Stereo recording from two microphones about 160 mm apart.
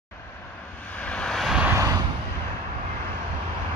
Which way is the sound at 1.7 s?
20° right (ahead or behind).